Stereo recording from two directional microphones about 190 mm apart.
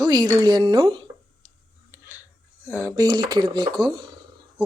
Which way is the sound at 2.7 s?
10° right (ahead or behind).